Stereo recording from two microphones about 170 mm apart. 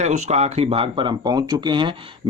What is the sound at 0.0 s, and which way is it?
Speech, 45° right (ahead or behind).